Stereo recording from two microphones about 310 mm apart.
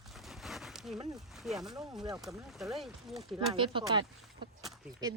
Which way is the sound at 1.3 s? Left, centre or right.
Centre.